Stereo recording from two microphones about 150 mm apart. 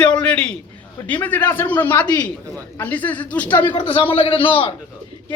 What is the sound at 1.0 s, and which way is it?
Speech, 10° left (ahead or behind).